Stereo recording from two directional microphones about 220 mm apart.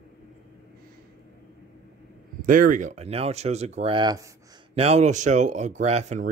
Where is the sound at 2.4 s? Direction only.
40° right (ahead or behind); by 4.3 s 15° right (ahead or behind).